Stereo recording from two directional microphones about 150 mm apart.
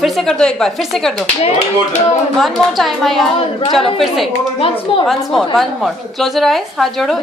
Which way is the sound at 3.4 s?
40° left (ahead or behind).